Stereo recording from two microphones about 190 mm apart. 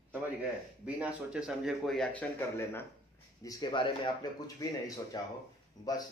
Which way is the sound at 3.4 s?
20° left (ahead or behind).